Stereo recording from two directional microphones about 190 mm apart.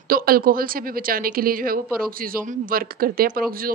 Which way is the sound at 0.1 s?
50° right (ahead or behind).